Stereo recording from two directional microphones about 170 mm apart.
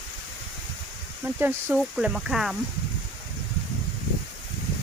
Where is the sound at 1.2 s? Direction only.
10° right (ahead or behind).